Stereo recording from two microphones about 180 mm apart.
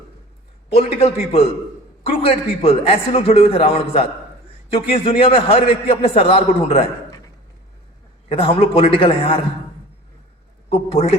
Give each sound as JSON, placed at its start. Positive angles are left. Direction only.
{"t": 0.7, "sound": "a man's voice", "side_deg": 35}
{"t": 8.3, "sound": "a man's voice", "side_deg": 30}
{"t": 10.7, "sound": "a man's voice", "side_deg": 30}